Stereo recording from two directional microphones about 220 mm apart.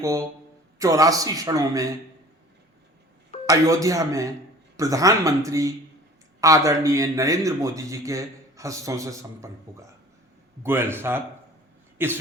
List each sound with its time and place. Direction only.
0.0 s a man's voice: 15° right (ahead or behind)
3.4 s a man's voice: 15° right (ahead or behind)
10.6 s a man's voice: 10° right (ahead or behind)